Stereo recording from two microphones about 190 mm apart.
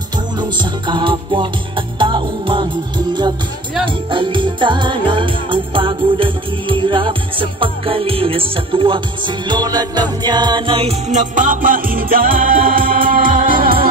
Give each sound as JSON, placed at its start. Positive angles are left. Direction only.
{"t": 0.4, "sound": "music", "side_deg": -25}
{"t": 3.8, "sound": "music", "side_deg": -25}